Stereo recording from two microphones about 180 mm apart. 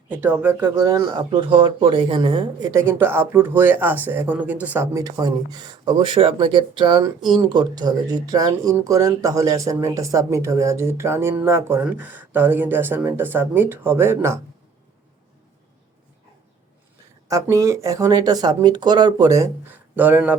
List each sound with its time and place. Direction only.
0.1 s speech: 10° right (ahead or behind); by 2.4 s 30° right (ahead or behind)
2.7 s speech: 15° right (ahead or behind)
17.2 s speech: 20° right (ahead or behind)
20.0 s speech: 10° right (ahead or behind)